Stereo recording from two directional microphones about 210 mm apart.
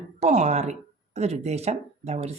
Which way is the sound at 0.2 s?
35° right (ahead or behind).